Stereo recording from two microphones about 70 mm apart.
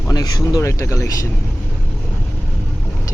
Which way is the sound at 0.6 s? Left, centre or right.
Left.